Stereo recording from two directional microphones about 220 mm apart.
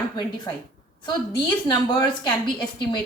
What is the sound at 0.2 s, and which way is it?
A woman's voice, 20° left (ahead or behind).